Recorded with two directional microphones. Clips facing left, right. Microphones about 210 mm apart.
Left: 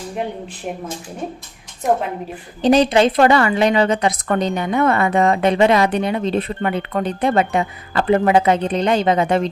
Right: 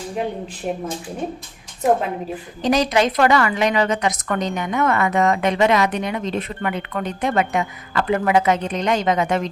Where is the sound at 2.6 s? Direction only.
30° left (ahead or behind).